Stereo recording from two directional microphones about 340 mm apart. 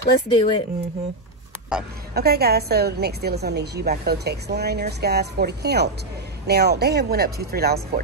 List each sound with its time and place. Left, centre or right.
0.3 s speech: centre
1.7 s a woman's voice: centre
2.1 s a woman's voice: right